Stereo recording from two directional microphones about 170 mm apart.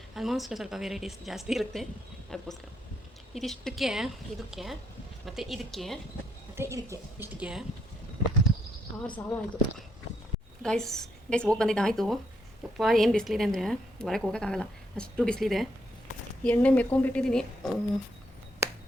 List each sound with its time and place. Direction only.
0.1 s a woman's voice: centre (ahead or behind)
6.6 s a woman's voice: 15° right (ahead or behind)
9.1 s a woman's voice: 10° left (ahead or behind)